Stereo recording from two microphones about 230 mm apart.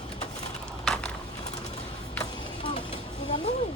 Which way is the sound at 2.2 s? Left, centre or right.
Left.